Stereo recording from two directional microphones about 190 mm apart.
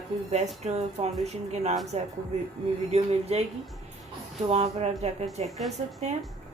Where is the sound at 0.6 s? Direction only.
35° right (ahead or behind).